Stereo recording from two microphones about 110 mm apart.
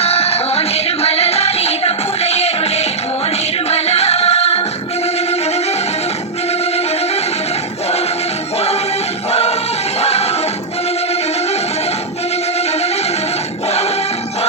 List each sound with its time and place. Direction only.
0.0 s music: 70° left (ahead or behind)
8.5 s music: 70° left (ahead or behind)